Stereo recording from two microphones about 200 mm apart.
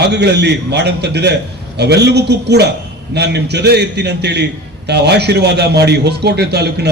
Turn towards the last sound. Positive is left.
turn(degrees=-55)  # may be behind; listen again after turning